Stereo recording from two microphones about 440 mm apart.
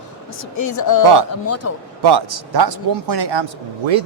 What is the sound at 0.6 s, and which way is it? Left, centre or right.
A woman's voice, left.